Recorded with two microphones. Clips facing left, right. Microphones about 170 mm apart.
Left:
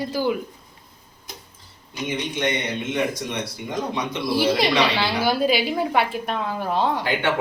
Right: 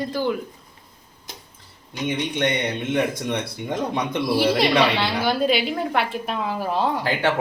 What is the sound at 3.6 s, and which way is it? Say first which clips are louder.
Speech: right 2 dB; 55° right (ahead or behind).